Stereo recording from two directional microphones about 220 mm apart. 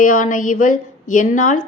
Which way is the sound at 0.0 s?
35° left (ahead or behind).